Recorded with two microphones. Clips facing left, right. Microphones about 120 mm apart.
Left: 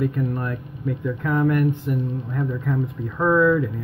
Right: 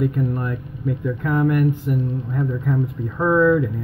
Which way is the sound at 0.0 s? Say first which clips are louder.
Right 2 dB; 10° right (ahead or behind).